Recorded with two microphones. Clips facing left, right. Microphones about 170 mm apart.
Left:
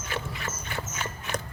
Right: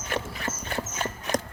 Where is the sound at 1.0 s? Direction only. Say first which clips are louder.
Right 6 dB; 40° right (ahead or behind).